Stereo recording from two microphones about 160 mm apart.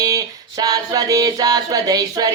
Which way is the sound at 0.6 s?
20° right (ahead or behind).